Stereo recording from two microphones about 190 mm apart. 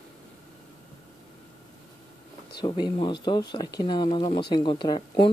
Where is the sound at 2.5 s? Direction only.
20° left (ahead or behind).